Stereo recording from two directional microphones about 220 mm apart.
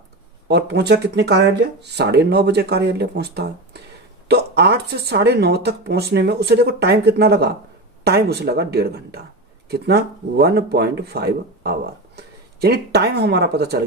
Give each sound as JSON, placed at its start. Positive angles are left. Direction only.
{"t": 0.4, "sound": "speech", "side_deg": -50}